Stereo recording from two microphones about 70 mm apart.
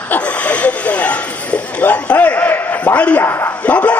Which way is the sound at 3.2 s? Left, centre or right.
Left.